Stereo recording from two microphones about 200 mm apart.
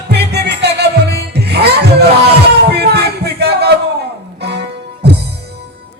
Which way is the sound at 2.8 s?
55° right (ahead or behind).